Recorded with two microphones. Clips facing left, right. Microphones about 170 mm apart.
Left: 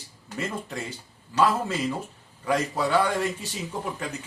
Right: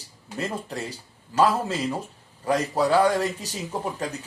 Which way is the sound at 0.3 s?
35° right (ahead or behind).